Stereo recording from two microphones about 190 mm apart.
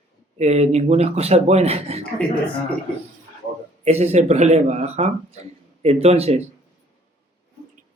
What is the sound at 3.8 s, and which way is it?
A man's voice, 35° right (ahead or behind).